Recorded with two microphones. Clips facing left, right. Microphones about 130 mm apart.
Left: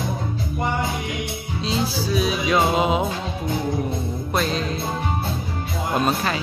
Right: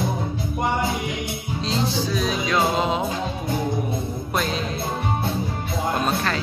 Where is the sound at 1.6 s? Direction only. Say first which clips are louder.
Even; 5° left (ahead or behind).